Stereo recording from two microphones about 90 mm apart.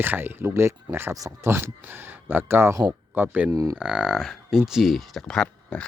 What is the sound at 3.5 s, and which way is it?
Speech, 40° right (ahead or behind).